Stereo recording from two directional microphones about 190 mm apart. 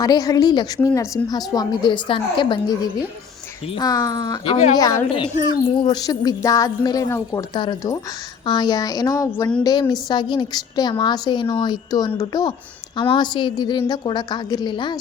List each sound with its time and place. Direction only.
0.0 s a woman's voice: 20° left (ahead or behind)
3.8 s a woman's voice: 20° left (ahead or behind)